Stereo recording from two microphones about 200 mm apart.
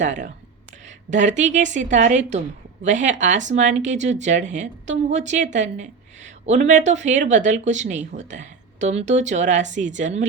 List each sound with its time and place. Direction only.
0.0 s speech: 35° right (ahead or behind)